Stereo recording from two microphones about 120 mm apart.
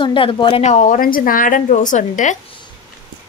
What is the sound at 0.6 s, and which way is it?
A woman's voice, 80° left.